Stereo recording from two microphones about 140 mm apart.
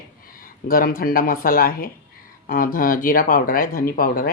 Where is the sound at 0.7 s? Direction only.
90° left.